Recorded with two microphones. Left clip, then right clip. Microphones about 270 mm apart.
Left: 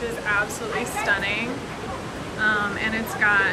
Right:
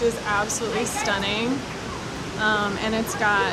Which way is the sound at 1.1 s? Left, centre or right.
Centre.